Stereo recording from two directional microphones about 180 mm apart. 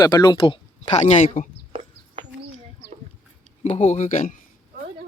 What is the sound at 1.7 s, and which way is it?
Chicken, 40° right (ahead or behind).